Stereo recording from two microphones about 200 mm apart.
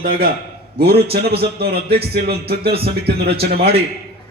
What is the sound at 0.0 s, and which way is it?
A man's voice, 50° right (ahead or behind).